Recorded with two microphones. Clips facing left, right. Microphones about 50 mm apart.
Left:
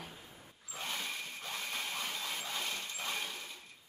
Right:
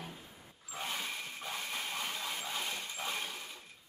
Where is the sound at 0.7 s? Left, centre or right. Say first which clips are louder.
Right 1 dB; centre.